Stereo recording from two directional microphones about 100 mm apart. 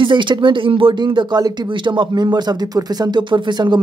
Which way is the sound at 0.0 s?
55° right (ahead or behind).